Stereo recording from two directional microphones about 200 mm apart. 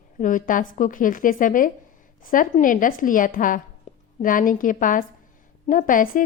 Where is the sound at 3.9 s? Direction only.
35° left (ahead or behind).